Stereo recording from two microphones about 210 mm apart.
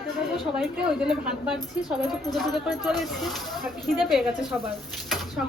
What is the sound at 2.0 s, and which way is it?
Speech, centre (ahead or behind).